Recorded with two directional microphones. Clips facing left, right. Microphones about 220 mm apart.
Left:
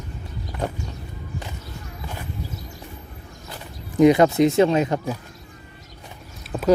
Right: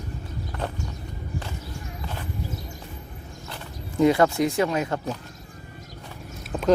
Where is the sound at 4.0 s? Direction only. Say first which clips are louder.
Left 5 dB; 20° left (ahead or behind).